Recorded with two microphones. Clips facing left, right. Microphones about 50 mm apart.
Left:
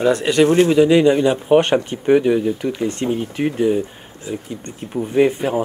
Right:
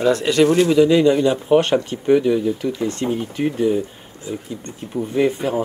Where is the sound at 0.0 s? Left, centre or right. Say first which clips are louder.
Left 1 dB; left.